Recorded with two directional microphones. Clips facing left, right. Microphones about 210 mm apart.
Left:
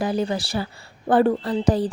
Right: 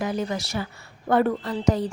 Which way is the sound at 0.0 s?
30° left (ahead or behind).